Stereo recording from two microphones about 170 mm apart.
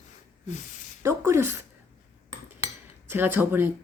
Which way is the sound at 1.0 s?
15° right (ahead or behind).